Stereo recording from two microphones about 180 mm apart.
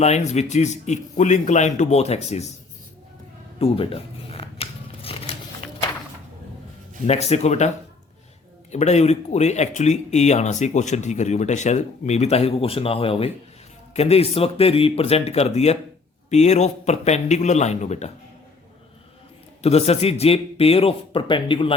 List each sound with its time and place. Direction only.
0.0 s speech: 40° left (ahead or behind)
3.6 s shuffling cards: 35° left (ahead or behind)
7.1 s speech: 35° left (ahead or behind)
8.7 s speech: 40° left (ahead or behind)
19.6 s speech: 35° left (ahead or behind)